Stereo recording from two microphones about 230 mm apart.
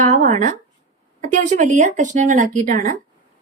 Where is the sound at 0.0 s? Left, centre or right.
Right.